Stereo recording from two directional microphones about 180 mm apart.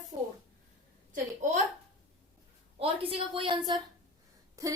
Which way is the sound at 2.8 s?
30° right (ahead or behind).